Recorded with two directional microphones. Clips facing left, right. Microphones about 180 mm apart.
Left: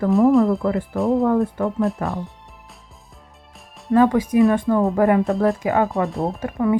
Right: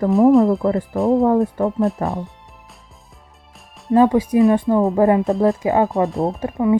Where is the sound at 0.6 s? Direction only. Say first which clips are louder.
Right 3 dB; 35° right (ahead or behind).